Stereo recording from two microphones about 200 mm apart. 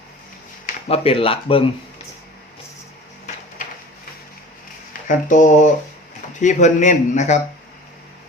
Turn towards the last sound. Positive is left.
turn(degrees=35)  # may be behind; listen again after turning